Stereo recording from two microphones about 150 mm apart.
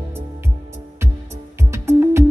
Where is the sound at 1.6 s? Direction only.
20° right (ahead or behind).